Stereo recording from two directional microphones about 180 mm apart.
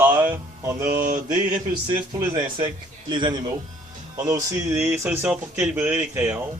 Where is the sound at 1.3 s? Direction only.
20° right (ahead or behind).